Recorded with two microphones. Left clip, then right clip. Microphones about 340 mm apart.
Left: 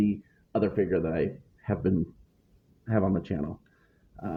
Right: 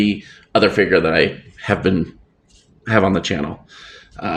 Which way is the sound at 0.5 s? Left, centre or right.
Left.